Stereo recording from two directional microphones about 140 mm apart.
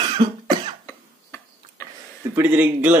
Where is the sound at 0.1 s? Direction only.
35° right (ahead or behind).